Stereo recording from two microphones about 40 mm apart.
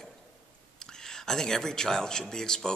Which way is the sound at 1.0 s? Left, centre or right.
Centre.